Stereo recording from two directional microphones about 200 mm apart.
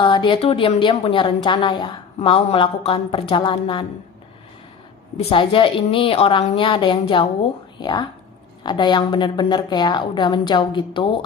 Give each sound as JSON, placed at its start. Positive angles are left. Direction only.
{"t": 0.0, "sound": "a woman's voice", "side_deg": 25}
{"t": 5.3, "sound": "a woman's voice", "side_deg": 25}